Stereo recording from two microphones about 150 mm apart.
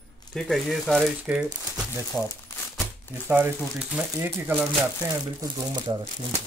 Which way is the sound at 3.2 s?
15° right (ahead or behind).